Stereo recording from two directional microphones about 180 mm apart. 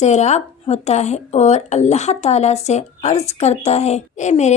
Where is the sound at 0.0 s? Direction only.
40° left (ahead or behind).